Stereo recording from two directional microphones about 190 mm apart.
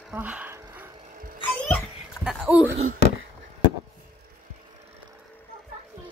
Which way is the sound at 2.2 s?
5° right (ahead or behind).